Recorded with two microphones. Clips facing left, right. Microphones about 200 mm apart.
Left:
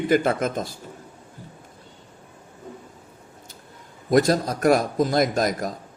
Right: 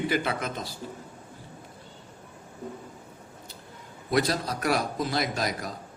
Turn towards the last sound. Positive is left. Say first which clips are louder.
# left 7 dB
turn(degrees=45)  # may be behind; listen again after turning